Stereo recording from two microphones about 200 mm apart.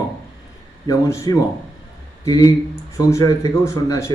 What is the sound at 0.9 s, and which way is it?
Speech, 15° left (ahead or behind).